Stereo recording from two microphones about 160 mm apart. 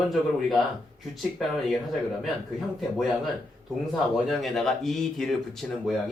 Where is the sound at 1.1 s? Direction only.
Centre (ahead or behind).